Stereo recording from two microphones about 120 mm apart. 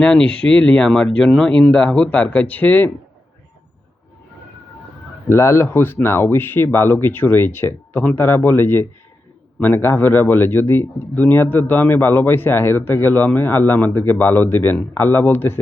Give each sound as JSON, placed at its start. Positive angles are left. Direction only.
{"t": 0.0, "sound": "speech", "side_deg": 10}
{"t": 5.3, "sound": "speech", "side_deg": 20}